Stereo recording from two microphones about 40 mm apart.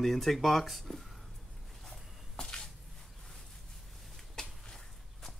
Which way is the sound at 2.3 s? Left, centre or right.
Left.